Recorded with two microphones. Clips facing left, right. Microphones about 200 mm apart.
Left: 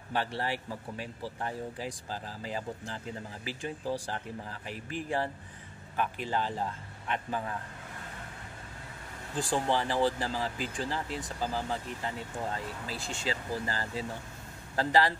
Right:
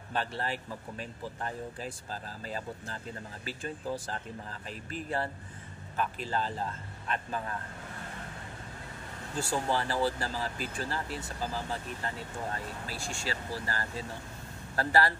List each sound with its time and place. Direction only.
0.4 s speech: 15° left (ahead or behind)
9.3 s speech: 15° left (ahead or behind)